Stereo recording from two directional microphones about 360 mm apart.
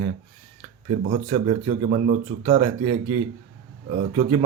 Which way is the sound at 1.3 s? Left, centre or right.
Centre.